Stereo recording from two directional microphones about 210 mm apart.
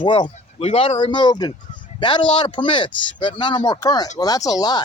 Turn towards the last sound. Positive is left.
turn(degrees=20)  # may be behind; listen again after turning